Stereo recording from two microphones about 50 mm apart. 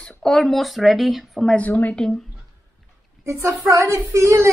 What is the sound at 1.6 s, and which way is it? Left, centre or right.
Speech, left.